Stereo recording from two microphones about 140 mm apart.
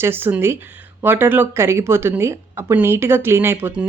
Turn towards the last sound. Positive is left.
turn(degrees=-15)  # may be behind; listen again after turning